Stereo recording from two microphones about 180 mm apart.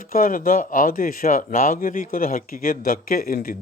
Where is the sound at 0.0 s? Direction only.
50° left (ahead or behind).